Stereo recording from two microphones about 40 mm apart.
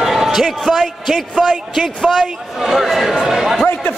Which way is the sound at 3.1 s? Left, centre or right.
Centre.